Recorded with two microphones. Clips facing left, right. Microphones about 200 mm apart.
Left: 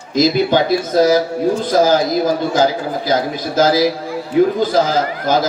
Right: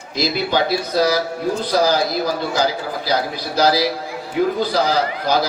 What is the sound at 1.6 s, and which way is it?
A man's voice, 45° left (ahead or behind).